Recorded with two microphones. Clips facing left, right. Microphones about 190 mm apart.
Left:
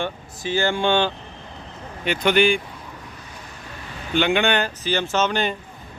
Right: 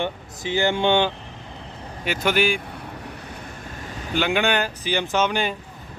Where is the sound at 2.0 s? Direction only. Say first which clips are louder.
Left 3 dB; 5° right (ahead or behind).